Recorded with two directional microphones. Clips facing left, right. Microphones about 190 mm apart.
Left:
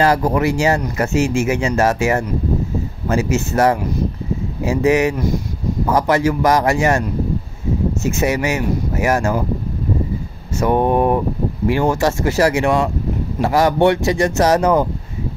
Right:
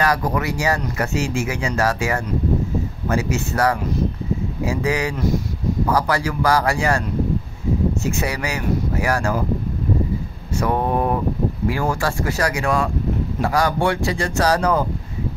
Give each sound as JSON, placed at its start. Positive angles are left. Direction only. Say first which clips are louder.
{"t": 0.0, "sound": "speech", "louder": "left 5 dB", "side_deg": 25}
{"t": 10.6, "sound": "speech", "louder": "left 5 dB", "side_deg": 25}